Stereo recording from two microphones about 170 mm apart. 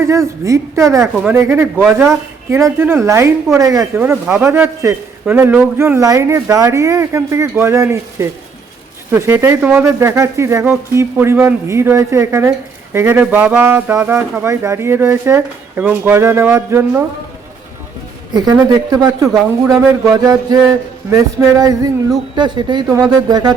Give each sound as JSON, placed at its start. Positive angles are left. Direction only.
{"t": 0.4, "sound": "speech", "side_deg": -20}
{"t": 18.9, "sound": "speech", "side_deg": -20}